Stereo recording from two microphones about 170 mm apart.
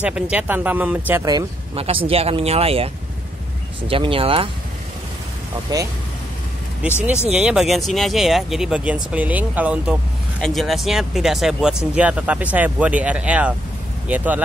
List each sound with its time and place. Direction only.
0.0 s speech: 10° right (ahead or behind)
1.8 s speech: 35° right (ahead or behind)
5.7 s speech: 25° right (ahead or behind)
7.2 s speech: 5° right (ahead or behind)